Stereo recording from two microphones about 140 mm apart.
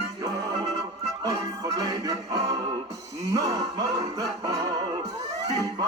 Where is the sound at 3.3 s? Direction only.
25° right (ahead or behind).